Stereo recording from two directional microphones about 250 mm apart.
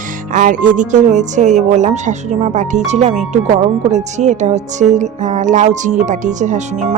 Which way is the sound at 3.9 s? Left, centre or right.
Right.